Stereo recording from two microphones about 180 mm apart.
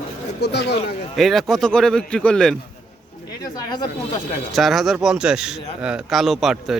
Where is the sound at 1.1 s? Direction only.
Centre (ahead or behind).